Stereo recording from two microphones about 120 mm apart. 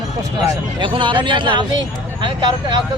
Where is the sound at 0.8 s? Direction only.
40° right (ahead or behind).